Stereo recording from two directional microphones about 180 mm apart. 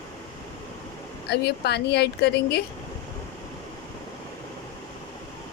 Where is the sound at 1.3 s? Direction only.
65° left (ahead or behind).